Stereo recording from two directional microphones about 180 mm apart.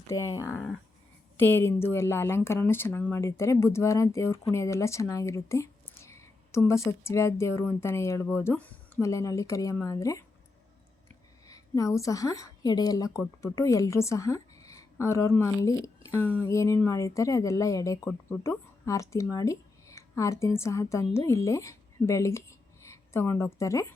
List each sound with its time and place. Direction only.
0.1 s speech: 15° left (ahead or behind)
11.4 s a woman's voice: 20° left (ahead or behind)